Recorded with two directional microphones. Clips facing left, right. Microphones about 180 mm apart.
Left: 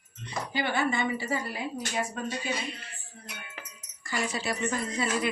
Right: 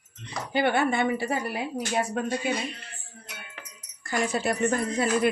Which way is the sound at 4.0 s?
50° right (ahead or behind).